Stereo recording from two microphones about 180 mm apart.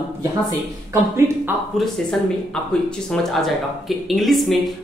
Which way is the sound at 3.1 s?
Centre (ahead or behind).